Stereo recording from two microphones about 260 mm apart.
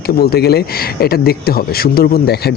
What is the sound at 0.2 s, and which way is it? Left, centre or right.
Speech, left.